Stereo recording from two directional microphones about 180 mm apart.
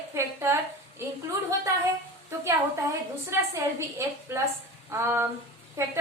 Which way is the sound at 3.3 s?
15° right (ahead or behind).